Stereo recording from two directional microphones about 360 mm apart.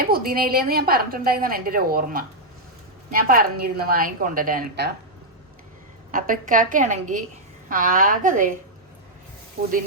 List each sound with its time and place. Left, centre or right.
0.0 s a woman's voice: right
6.1 s a woman's voice: right